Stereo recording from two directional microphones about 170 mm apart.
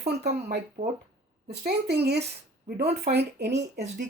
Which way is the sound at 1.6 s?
70° right (ahead or behind).